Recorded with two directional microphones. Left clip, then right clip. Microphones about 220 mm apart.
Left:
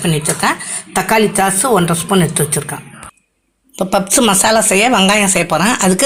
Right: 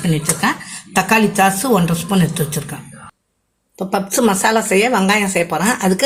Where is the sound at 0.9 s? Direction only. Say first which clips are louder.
Left 1 dB; 20° left (ahead or behind).